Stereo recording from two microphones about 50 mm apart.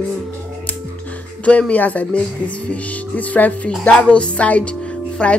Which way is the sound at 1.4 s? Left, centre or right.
Left.